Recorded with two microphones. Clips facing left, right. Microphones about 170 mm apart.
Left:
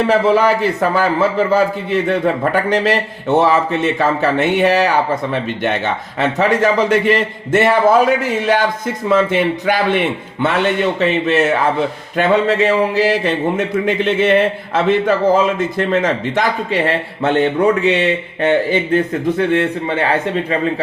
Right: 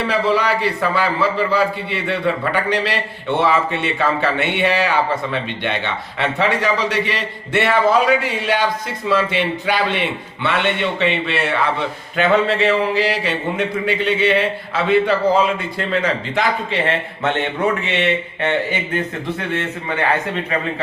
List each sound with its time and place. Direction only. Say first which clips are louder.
0.0 s a man's voice: left 5 dB; 50° left (ahead or behind)